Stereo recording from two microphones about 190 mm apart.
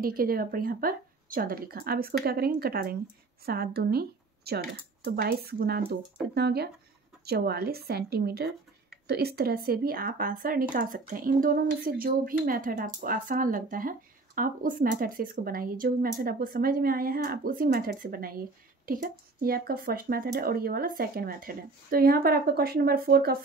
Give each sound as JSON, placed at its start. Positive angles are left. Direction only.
{"t": 0.0, "sound": "a woman's voice", "side_deg": -50}